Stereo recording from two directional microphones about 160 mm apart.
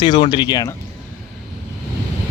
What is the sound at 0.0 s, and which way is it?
Speech, 30° left (ahead or behind).